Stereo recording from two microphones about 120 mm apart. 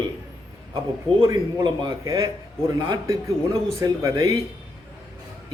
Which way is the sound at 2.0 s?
30° right (ahead or behind).